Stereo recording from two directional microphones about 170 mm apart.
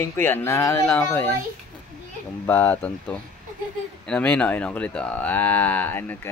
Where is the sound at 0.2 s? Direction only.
10° left (ahead or behind).